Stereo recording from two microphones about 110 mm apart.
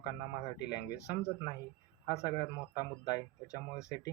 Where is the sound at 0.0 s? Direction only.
35° left (ahead or behind).